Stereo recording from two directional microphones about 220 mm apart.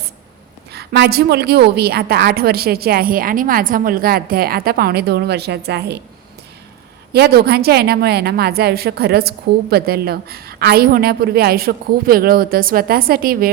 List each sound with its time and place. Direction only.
0.7 s a woman's voice: 45° right (ahead or behind)
7.1 s a woman's voice: 45° right (ahead or behind)